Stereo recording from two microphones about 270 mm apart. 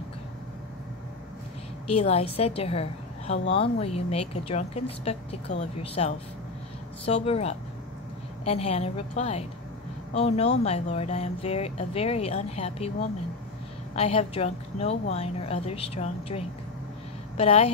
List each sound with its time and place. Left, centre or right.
1.9 s a woman's voice: left
13.9 s speech: left